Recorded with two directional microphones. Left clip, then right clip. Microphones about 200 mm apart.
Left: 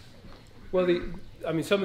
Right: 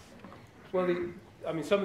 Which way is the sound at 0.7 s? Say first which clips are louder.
Left 5 dB; 55° left (ahead or behind).